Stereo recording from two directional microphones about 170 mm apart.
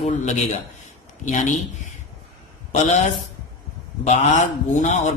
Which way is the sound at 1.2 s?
45° left (ahead or behind).